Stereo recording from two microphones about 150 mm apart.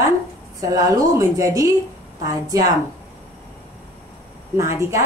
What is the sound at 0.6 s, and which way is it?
A woman's voice, 25° right (ahead or behind).